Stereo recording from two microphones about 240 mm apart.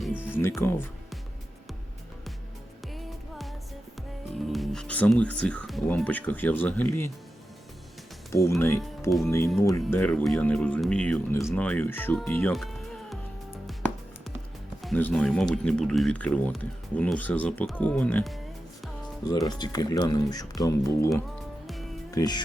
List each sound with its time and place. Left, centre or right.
0.0 s music: centre
0.5 s speech: centre
2.8 s music: centre
4.4 s speech: centre
8.4 s speech: centre
9.6 s speech: centre
14.8 s speech: centre
19.3 s speech: centre
22.1 s speech: centre